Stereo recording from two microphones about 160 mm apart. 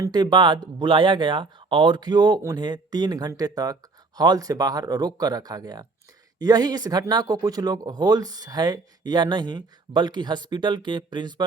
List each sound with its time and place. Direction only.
0.0 s speech: 25° right (ahead or behind)